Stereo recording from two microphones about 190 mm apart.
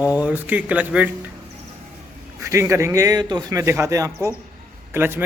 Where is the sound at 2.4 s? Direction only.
15° right (ahead or behind).